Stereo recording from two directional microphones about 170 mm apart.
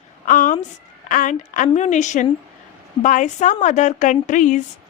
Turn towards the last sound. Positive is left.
turn(degrees=50)  # may be behind; listen again after turning